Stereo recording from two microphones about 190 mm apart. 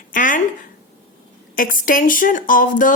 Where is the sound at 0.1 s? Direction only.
45° left (ahead or behind).